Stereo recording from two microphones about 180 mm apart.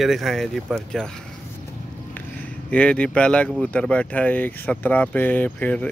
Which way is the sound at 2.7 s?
5° left (ahead or behind).